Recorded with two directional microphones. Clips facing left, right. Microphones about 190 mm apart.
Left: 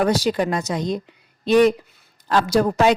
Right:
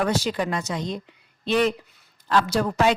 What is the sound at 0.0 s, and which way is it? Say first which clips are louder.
A woman's voice: left 5 dB; 40° left (ahead or behind).